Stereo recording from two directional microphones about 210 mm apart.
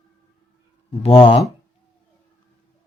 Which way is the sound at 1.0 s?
25° left (ahead or behind).